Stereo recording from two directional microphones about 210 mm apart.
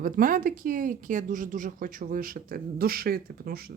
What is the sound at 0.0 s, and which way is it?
Speech, 40° right (ahead or behind).